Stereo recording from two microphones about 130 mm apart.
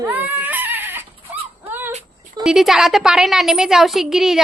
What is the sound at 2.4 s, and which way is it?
A woman's voice, 5° right (ahead or behind).